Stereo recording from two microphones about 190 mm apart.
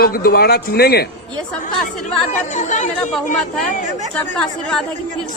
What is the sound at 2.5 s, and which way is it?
Music, 40° left (ahead or behind).